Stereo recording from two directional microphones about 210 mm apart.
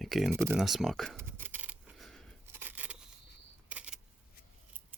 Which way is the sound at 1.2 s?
10° right (ahead or behind).